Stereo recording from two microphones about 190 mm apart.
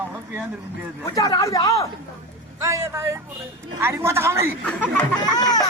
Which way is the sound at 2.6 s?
15° right (ahead or behind).